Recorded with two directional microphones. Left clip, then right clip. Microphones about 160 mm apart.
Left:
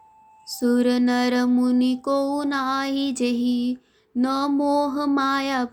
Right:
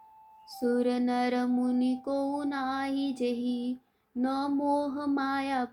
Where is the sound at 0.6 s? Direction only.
55° left (ahead or behind).